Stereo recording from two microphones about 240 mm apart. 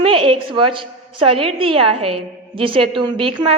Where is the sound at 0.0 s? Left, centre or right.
Right.